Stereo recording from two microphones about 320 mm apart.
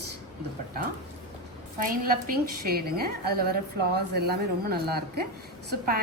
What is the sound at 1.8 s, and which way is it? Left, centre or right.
A woman's voice, right.